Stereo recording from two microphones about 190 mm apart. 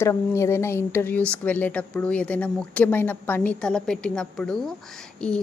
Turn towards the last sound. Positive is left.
turn(degrees=5)  # may be behind; listen again after turning